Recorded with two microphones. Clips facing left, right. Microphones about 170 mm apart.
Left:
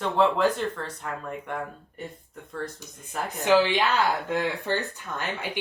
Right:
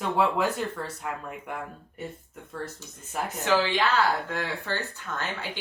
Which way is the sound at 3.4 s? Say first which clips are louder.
Left 4 dB; 15° left (ahead or behind).